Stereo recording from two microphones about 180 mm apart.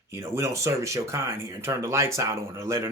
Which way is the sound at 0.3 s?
15° right (ahead or behind).